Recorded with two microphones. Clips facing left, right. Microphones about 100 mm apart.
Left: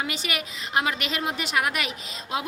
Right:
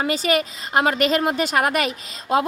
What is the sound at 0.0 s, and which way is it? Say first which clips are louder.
A woman's voice: right 10 dB; 40° right (ahead or behind).